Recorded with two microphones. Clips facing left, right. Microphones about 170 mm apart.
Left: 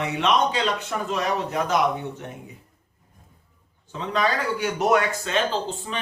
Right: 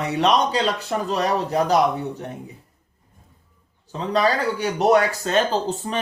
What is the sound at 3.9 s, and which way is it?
A man's voice, 35° right (ahead or behind).